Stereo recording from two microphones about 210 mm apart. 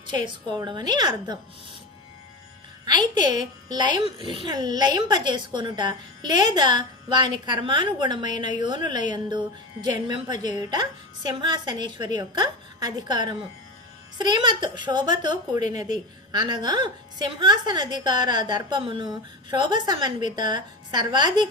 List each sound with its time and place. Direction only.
0.5 s a woman's voice: 20° right (ahead or behind)
2.8 s a woman's voice: 20° right (ahead or behind)